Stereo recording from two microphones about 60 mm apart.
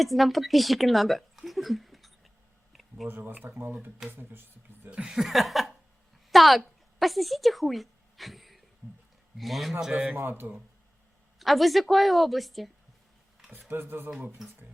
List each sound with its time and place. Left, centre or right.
0.0 s speech: centre
3.1 s speech: right
4.9 s a woman's voice: centre
9.9 s a man's voice: right
10.2 s speech: right
11.3 s a woman's voice: centre
13.7 s speech: right
14.1 s speech: centre